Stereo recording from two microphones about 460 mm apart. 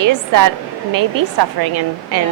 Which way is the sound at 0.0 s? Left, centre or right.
Right.